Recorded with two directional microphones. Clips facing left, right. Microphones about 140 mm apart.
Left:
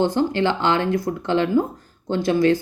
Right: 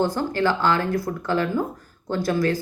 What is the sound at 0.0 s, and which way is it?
Speech, 20° left (ahead or behind).